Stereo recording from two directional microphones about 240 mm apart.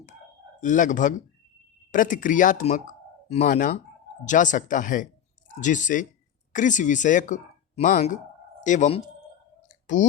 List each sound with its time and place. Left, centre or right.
0.6 s speech: left